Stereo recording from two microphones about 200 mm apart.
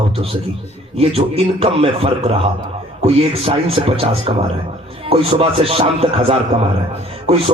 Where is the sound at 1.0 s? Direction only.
30° right (ahead or behind).